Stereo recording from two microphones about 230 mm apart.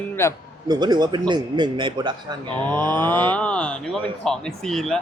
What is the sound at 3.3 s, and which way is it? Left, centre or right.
Speech, centre.